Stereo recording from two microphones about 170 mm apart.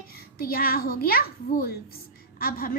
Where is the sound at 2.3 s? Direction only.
60° left (ahead or behind).